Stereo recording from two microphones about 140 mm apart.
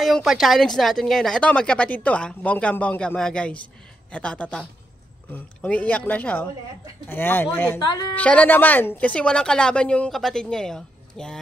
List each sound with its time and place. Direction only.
0.0 s speech: centre (ahead or behind)